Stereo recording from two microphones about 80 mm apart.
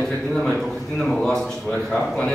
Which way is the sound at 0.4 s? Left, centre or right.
Centre.